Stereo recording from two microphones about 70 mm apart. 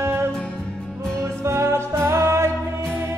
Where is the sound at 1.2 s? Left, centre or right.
Right.